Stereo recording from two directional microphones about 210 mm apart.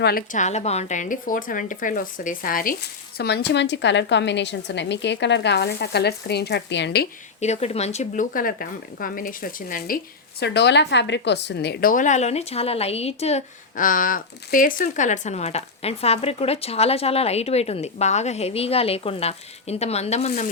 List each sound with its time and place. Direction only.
0.0 s a woman's voice: 45° left (ahead or behind)
7.4 s a woman's voice: 30° left (ahead or behind)
10.4 s a woman's voice: 55° left (ahead or behind); by 20.3 s 30° left (ahead or behind)